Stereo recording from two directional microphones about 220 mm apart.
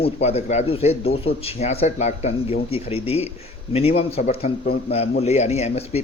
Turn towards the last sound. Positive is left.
turn(degrees=30)  # may be behind; listen again after turning